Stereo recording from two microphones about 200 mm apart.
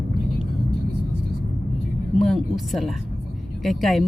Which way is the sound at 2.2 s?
Centre (ahead or behind).